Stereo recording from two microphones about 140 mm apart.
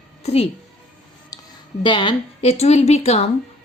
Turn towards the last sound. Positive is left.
turn(degrees=50)  # may be behind; listen again after turning